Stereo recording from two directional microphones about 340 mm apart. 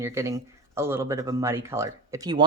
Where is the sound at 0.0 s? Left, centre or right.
Centre.